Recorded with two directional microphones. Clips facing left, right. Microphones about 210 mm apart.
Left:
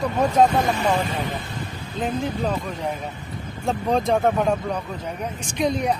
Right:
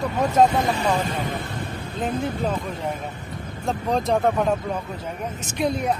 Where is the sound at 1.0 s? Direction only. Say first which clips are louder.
Even; 45° right (ahead or behind).